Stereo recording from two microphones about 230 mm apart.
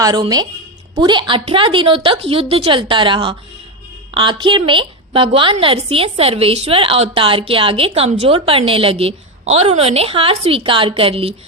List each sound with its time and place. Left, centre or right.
0.0 s a woman's voice: centre